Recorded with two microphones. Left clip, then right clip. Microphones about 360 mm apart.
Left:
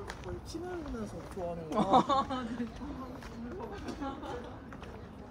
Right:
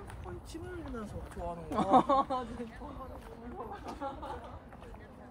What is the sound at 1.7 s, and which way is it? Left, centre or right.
Speech, right.